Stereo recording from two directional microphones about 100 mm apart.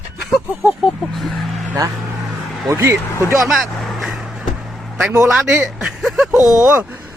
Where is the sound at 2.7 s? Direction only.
25° right (ahead or behind).